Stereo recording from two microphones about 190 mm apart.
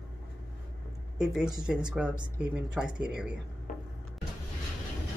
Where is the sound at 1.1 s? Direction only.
5° right (ahead or behind).